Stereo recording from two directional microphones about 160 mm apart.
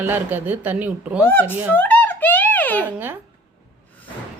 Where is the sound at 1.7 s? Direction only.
10° left (ahead or behind).